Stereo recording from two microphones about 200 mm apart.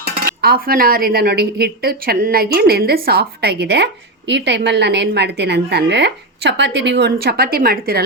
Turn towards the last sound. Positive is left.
turn(degrees=-50)  # may be behind; listen again after turning